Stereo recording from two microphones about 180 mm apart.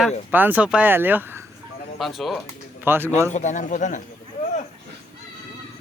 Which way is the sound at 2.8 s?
10° right (ahead or behind).